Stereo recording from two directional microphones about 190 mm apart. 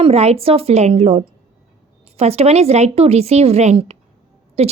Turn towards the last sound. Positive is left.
turn(degrees=-35)  # may be behind; listen again after turning